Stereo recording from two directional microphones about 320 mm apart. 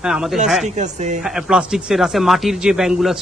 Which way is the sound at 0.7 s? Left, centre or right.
Right.